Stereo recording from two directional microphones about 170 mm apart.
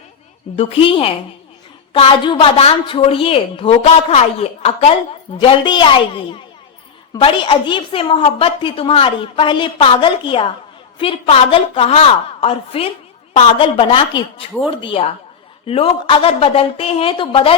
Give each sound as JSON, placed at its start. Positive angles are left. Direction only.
{"t": 0.5, "sound": "a woman's voice", "side_deg": 30}